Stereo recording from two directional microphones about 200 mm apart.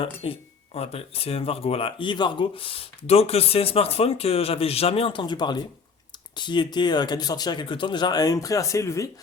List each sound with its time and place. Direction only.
0.0 s speech: 25° left (ahead or behind)